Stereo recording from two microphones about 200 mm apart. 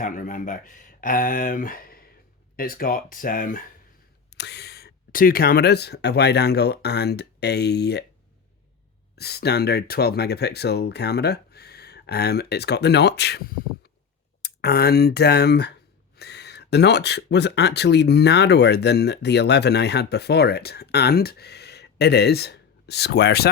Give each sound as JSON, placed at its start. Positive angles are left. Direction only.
{"t": 0.0, "sound": "speech", "side_deg": 40}
{"t": 4.4, "sound": "speech", "side_deg": 55}
{"t": 9.1, "sound": "speech", "side_deg": 55}